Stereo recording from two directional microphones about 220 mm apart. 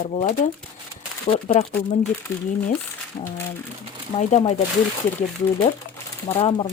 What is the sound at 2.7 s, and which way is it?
Speech, 10° left (ahead or behind).